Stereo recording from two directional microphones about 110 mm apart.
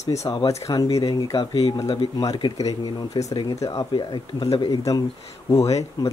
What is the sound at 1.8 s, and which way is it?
Speech, 50° left (ahead or behind).